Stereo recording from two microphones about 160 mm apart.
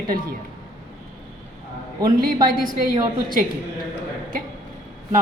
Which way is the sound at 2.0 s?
65° right (ahead or behind).